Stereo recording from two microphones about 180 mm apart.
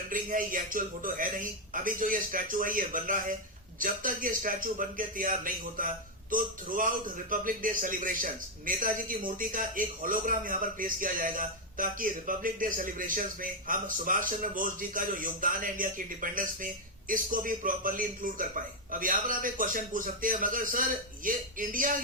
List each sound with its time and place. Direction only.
0.1 s a man's voice: 50° right (ahead or behind)